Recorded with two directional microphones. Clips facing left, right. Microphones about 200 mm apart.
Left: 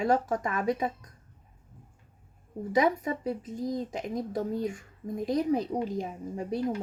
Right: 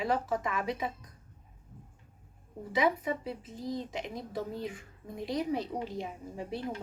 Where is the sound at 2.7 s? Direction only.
45° left (ahead or behind).